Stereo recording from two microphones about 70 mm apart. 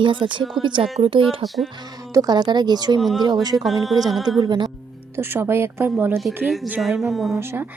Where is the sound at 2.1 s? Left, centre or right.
Right.